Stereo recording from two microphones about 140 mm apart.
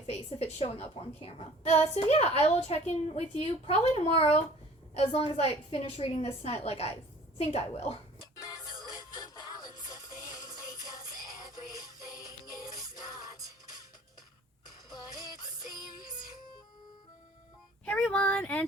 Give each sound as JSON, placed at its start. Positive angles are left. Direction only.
{"t": 0.1, "sound": "a woman's voice", "side_deg": 45}
{"t": 9.0, "sound": "music", "side_deg": 30}
{"t": 11.4, "sound": "synthetic singing", "side_deg": -25}
{"t": 13.2, "sound": "music", "side_deg": -25}
{"t": 17.8, "sound": "a sound", "side_deg": 5}